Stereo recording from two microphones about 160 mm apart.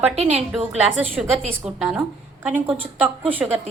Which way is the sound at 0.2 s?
40° right (ahead or behind).